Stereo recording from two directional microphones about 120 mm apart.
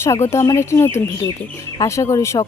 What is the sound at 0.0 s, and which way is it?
A woman's voice, 20° left (ahead or behind).